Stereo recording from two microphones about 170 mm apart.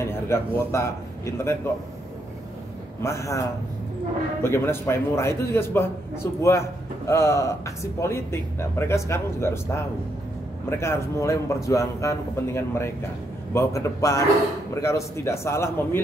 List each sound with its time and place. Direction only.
0.0 s a man's voice: 15° left (ahead or behind)
3.0 s a man's voice: 15° left (ahead or behind)